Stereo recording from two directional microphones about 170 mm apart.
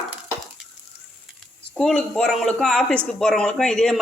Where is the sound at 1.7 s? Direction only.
5° left (ahead or behind).